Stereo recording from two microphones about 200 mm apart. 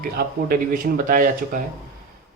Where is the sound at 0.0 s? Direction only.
50° right (ahead or behind).